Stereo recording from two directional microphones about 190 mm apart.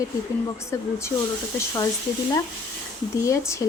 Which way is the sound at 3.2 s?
15° left (ahead or behind).